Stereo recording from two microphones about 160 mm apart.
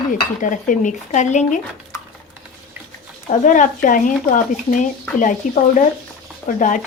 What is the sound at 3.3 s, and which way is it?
A woman's voice, 55° left (ahead or behind).